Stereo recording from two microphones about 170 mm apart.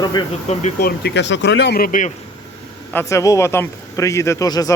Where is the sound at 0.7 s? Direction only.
70° left (ahead or behind).